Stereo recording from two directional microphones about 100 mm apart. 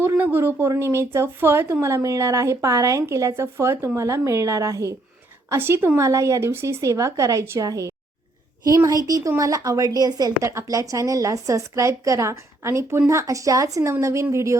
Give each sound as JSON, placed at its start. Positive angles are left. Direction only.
{"t": 0.0, "sound": "a woman's voice", "side_deg": -20}